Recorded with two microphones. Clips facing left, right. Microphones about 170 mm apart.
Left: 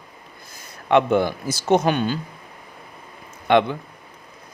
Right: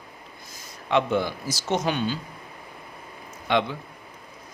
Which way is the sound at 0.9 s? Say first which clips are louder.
Left 6 dB; 55° left (ahead or behind).